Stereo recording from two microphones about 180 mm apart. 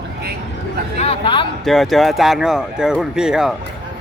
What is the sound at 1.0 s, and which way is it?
Speech, 30° left (ahead or behind).